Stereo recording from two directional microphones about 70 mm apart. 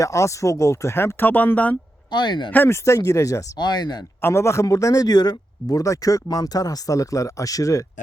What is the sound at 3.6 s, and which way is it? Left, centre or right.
Speech, left.